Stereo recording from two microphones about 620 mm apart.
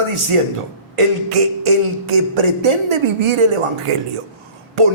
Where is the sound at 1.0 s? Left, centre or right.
Right.